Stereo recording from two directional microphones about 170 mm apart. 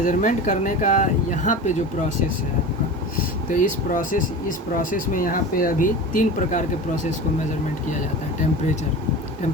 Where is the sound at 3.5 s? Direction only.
50° left (ahead or behind).